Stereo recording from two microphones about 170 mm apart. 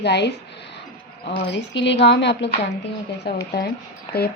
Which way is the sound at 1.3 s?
90° left.